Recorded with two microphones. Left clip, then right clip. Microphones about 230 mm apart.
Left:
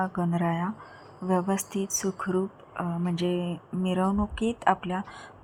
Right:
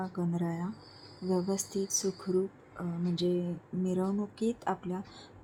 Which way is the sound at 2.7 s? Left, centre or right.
Left.